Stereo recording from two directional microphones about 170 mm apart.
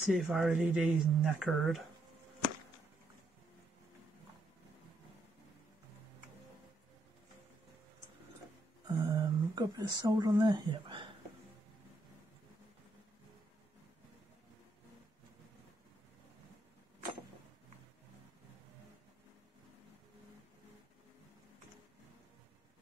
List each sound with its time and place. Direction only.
0.0 s speech: 10° right (ahead or behind)
8.8 s a sound: 20° right (ahead or behind)
9.9 s a woman's voice: 20° right (ahead or behind)